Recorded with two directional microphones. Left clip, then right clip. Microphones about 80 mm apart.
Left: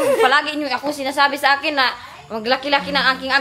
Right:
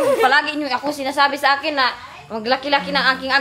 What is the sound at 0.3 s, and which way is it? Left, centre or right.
A woman's voice, centre.